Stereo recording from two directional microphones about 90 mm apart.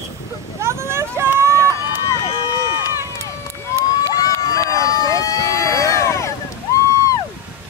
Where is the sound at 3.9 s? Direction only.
40° left (ahead or behind).